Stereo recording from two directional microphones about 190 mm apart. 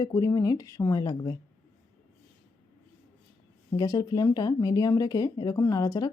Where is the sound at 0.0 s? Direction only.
15° left (ahead or behind).